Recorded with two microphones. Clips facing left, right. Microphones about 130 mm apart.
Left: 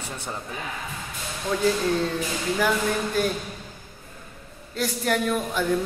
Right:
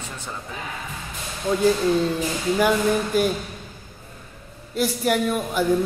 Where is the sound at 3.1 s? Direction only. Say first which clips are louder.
Right 3 dB; 15° right (ahead or behind).